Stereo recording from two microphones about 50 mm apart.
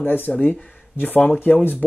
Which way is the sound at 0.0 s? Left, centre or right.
Left.